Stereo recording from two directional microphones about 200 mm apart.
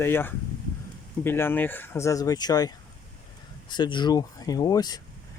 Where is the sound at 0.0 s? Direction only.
10° left (ahead or behind).